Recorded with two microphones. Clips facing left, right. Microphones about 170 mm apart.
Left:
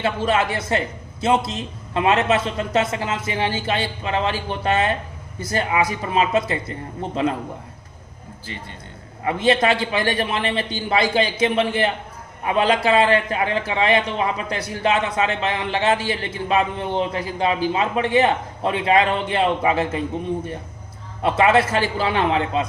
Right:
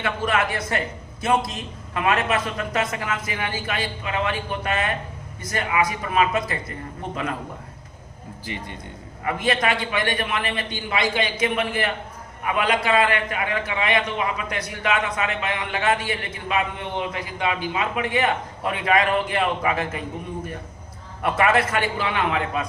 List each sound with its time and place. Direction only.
0.0 s a man's voice: 25° left (ahead or behind)
8.5 s a man's voice: 15° right (ahead or behind)
9.2 s a man's voice: 25° left (ahead or behind)
21.2 s a man's voice: 25° left (ahead or behind)